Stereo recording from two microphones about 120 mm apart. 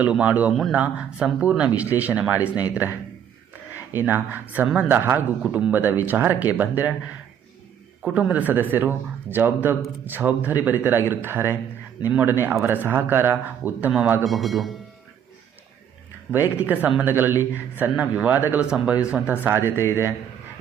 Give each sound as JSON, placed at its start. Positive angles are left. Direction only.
{"t": 0.0, "sound": "speech", "side_deg": -10}
{"t": 4.0, "sound": "speech", "side_deg": -15}
{"t": 8.0, "sound": "speech", "side_deg": -10}
{"t": 14.3, "sound": "a man's voice", "side_deg": 0}
{"t": 16.3, "sound": "speech", "side_deg": -15}
{"t": 19.7, "sound": "speech", "side_deg": 20}